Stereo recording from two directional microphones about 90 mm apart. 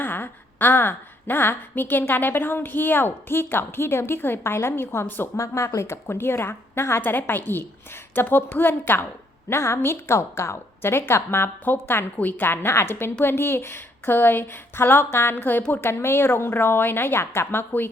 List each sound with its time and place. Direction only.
0.0 s a woman's voice: 20° left (ahead or behind)
5.4 s a woman's voice: 35° left (ahead or behind)